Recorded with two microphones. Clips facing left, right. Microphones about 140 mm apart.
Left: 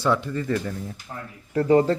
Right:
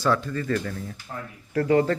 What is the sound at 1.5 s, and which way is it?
Speech, 25° left (ahead or behind).